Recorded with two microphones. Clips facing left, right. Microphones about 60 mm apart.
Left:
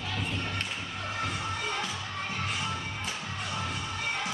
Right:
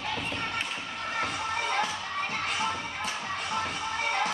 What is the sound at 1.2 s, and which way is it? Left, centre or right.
Music, right.